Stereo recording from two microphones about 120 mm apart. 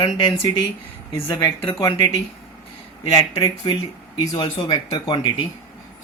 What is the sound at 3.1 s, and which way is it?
Speech, 35° left (ahead or behind).